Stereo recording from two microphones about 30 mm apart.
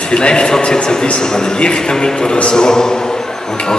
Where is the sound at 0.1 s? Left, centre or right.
Left.